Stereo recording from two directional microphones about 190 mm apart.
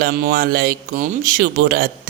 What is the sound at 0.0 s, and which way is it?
A woman's voice, 55° right (ahead or behind).